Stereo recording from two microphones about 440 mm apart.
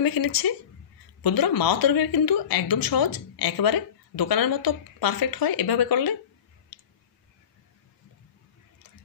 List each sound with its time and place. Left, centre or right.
0.0 s a woman's voice: left